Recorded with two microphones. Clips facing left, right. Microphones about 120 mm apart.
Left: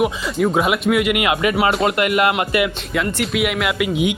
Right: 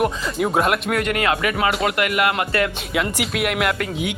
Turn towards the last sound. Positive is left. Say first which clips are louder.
# left 2 dB
turn(degrees=0)  # may be behind; listen again after turning